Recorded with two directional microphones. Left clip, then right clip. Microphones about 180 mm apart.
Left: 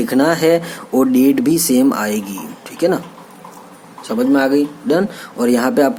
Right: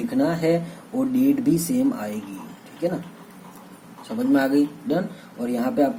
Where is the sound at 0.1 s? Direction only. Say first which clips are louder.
Left 8 dB; 40° left (ahead or behind).